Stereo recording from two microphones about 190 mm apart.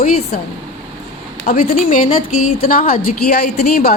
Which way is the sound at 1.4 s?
40° left (ahead or behind).